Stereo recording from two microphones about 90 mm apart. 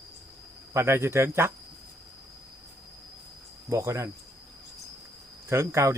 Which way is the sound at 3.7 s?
35° right (ahead or behind).